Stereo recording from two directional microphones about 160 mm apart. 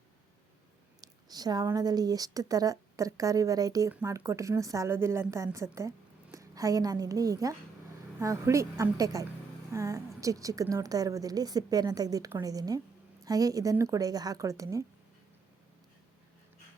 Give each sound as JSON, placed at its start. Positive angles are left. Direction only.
{"t": 1.0, "sound": "a woman's voice", "side_deg": -25}